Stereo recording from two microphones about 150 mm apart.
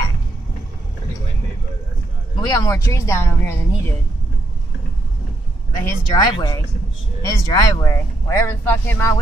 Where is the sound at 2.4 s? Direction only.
25° left (ahead or behind).